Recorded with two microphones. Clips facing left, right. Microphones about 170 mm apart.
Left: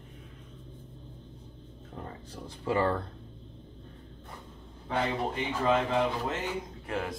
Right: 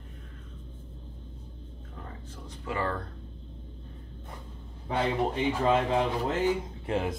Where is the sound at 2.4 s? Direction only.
30° left (ahead or behind).